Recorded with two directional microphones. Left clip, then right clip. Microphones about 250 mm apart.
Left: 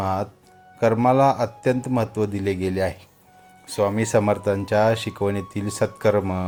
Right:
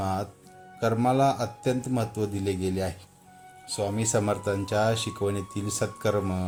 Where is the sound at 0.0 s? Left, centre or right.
Left.